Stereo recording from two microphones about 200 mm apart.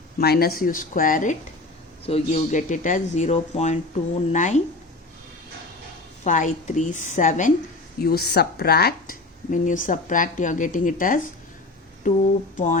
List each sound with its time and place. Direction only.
0.2 s speech: 50° left (ahead or behind)
6.2 s speech: 40° left (ahead or behind)
8.0 s speech: 50° left (ahead or behind)